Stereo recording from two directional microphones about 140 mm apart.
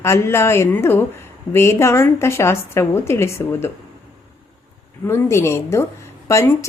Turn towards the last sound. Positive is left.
turn(degrees=20)  # may be behind; listen again after turning